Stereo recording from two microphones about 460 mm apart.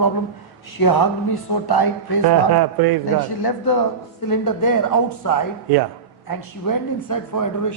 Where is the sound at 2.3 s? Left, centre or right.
Right.